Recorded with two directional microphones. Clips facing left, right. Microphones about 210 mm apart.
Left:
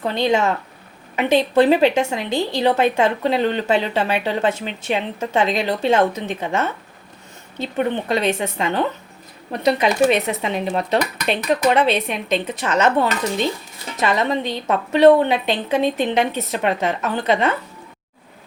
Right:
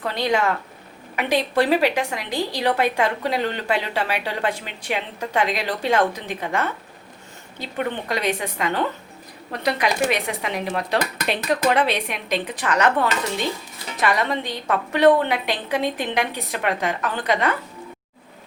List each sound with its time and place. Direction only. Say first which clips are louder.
0.0 s a woman's voice: left 3 dB; 25° left (ahead or behind)